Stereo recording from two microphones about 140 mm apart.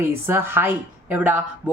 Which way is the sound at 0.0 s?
15° right (ahead or behind).